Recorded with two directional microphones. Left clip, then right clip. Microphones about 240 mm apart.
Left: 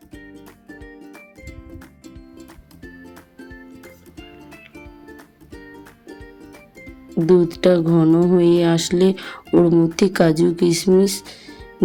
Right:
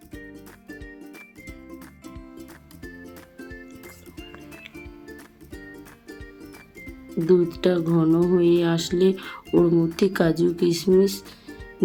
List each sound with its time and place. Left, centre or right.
7.3 s speech: left